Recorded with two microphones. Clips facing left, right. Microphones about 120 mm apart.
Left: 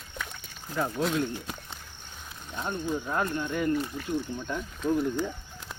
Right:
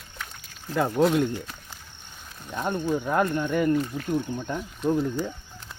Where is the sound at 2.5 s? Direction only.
55° right (ahead or behind).